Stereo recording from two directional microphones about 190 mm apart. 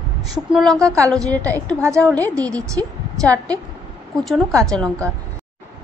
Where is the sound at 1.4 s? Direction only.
5° left (ahead or behind).